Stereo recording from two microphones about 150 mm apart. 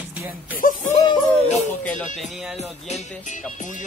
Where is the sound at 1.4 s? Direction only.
55° left (ahead or behind).